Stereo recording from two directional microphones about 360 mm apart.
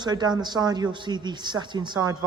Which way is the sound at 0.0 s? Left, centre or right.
Centre.